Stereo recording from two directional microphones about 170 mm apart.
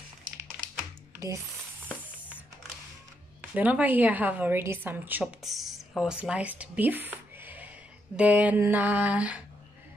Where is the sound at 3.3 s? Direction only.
10° right (ahead or behind).